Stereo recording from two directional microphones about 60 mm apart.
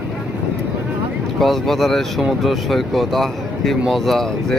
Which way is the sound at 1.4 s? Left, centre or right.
Centre.